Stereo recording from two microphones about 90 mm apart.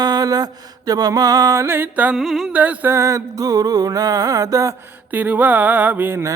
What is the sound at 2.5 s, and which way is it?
Music, 15° right (ahead or behind).